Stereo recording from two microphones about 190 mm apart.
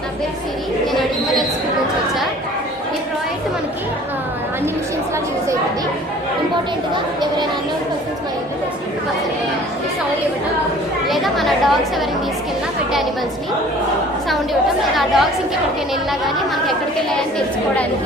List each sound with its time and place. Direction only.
6.9 s a sound: 25° right (ahead or behind)
11.1 s chatter: centre (ahead or behind)
14.9 s chatter: centre (ahead or behind)